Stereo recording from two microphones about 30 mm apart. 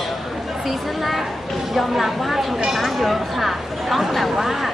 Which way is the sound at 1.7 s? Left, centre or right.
Centre.